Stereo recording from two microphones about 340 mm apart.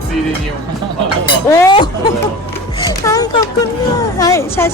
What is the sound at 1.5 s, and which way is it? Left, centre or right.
Speech, centre.